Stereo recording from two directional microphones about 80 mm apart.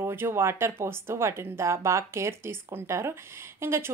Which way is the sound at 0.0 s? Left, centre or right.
Right.